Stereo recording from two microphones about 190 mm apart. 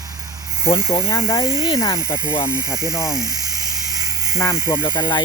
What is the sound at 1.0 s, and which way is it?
Speech, 15° left (ahead or behind).